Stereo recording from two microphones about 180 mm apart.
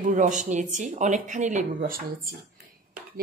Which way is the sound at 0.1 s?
45° right (ahead or behind).